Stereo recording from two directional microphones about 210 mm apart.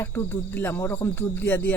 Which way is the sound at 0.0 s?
10° left (ahead or behind).